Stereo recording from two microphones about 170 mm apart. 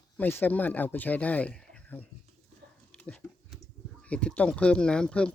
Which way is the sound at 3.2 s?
5° left (ahead or behind).